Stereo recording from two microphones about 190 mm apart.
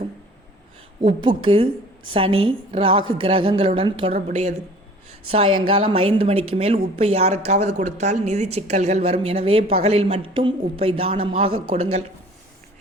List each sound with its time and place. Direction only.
1.4 s a woman's voice: 30° right (ahead or behind)